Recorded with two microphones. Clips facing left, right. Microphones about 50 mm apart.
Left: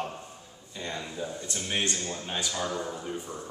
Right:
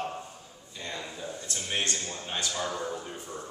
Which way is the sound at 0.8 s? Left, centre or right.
Centre.